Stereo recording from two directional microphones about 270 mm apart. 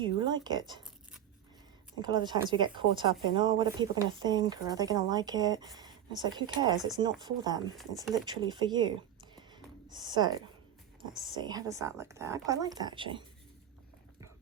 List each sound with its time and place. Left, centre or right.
0.3 s speech: centre
2.0 s speech: centre
9.9 s speech: centre